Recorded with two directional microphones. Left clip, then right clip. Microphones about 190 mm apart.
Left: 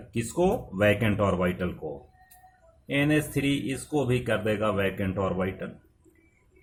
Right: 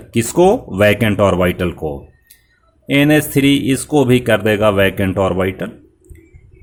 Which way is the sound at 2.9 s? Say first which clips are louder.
Right 12 dB; 50° right (ahead or behind).